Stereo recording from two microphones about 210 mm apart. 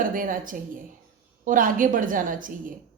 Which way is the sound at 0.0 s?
40° right (ahead or behind).